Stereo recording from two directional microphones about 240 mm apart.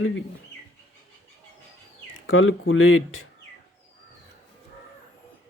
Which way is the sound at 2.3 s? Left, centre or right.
Left.